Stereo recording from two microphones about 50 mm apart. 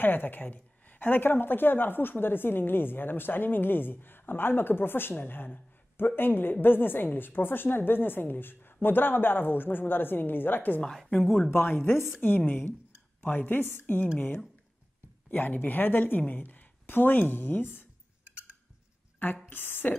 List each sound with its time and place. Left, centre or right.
0.0 s a woman's voice: left
15.3 s a woman's voice: left
19.2 s a woman's voice: left